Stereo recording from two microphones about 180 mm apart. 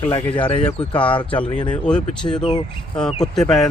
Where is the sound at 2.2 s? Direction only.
25° left (ahead or behind).